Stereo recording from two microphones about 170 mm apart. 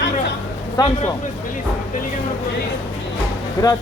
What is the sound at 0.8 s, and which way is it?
Speech, 20° left (ahead or behind).